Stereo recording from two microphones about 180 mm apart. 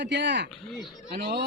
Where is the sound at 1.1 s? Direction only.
65° right (ahead or behind).